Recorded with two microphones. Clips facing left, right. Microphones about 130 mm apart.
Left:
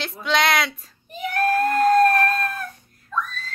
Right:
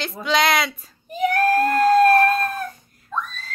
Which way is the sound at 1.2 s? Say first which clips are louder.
Right 3 dB; 40° right (ahead or behind).